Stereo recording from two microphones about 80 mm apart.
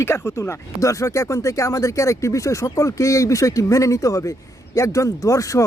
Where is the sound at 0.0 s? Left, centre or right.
Left.